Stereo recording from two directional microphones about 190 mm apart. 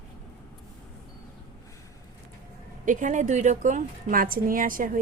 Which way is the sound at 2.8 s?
40° right (ahead or behind).